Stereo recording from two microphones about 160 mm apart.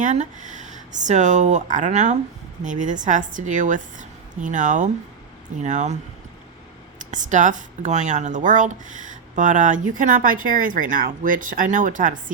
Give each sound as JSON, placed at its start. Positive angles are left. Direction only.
{"t": 0.0, "sound": "speech", "side_deg": -50}
{"t": 7.0, "sound": "speech", "side_deg": -50}